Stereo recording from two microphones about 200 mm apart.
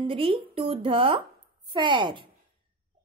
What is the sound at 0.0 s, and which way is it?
A woman's voice, 25° right (ahead or behind).